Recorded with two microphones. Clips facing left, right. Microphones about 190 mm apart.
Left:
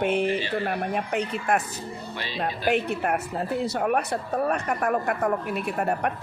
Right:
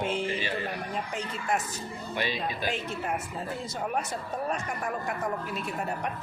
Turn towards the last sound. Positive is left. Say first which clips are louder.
# left 7 dB
turn(degrees=60)  # may be behind; listen again after turning